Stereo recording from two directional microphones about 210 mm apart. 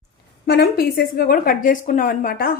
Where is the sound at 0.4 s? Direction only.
50° left (ahead or behind).